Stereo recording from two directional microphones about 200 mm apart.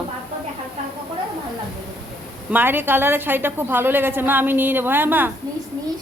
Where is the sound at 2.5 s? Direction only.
10° right (ahead or behind).